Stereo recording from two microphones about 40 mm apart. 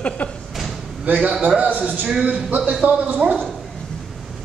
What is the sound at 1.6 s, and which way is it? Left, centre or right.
Speech, right.